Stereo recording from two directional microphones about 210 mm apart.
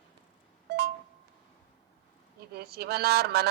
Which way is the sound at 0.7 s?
50° right (ahead or behind).